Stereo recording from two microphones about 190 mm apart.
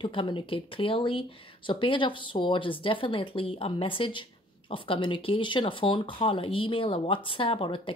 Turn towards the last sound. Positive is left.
turn(degrees=30)  # may be behind; listen again after turning